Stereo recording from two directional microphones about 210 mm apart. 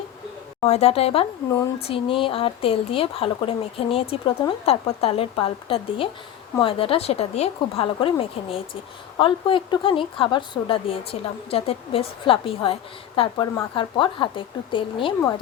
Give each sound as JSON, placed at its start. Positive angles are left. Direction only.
{"t": 0.6, "sound": "speech", "side_deg": 30}